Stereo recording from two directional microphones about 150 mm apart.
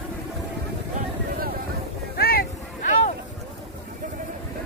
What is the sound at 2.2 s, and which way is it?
Boat, 85° left.